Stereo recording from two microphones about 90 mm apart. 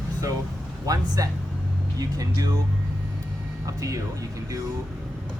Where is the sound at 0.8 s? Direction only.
45° right (ahead or behind).